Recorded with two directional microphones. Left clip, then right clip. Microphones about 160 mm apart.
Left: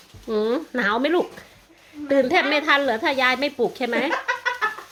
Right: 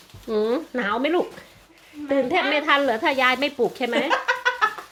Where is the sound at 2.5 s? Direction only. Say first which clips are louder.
Even; 5° left (ahead or behind).